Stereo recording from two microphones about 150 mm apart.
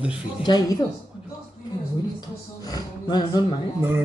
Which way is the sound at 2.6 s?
25° left (ahead or behind).